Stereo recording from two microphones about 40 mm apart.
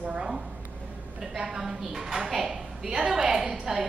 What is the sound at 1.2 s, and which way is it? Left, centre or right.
A woman's voice, centre.